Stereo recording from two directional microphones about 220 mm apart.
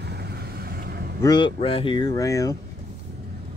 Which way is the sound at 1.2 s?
20° left (ahead or behind).